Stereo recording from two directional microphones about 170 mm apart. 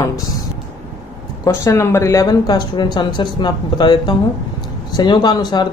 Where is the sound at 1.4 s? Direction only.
20° left (ahead or behind).